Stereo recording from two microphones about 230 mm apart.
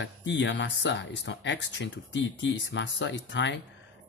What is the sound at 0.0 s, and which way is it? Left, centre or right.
Speech, left.